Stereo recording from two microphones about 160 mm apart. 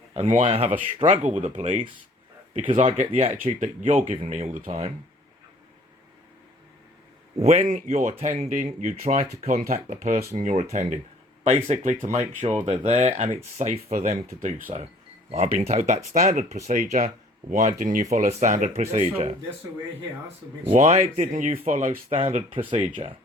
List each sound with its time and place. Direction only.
0.1 s speech: 40° right (ahead or behind)
7.3 s speech: 45° right (ahead or behind)
20.7 s speech: 45° right (ahead or behind)
22.2 s speech: 40° right (ahead or behind)